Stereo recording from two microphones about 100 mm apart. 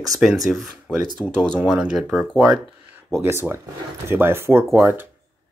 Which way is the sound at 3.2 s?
25° right (ahead or behind).